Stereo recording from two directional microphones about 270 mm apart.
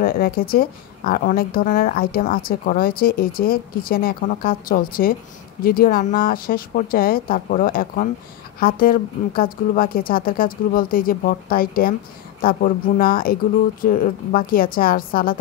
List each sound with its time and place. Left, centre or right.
0.0 s a woman's voice: left